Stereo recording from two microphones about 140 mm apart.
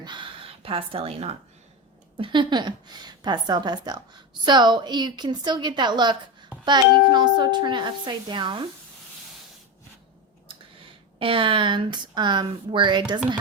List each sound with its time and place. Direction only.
0.0 s speech: 35° right (ahead or behind)
11.2 s speech: 40° right (ahead or behind)